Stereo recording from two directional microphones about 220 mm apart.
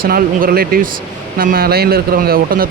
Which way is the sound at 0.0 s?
40° right (ahead or behind).